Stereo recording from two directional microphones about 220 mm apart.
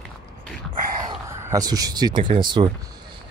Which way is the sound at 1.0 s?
15° right (ahead or behind).